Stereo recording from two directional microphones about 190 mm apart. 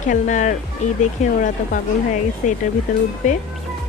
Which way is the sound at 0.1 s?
40° left (ahead or behind).